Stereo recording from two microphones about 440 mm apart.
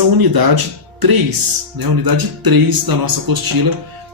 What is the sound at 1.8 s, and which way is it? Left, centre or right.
Speech, right.